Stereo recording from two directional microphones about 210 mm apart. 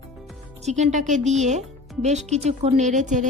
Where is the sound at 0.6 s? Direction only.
35° right (ahead or behind).